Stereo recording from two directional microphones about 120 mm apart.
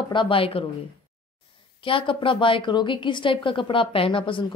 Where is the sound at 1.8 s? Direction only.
45° left (ahead or behind).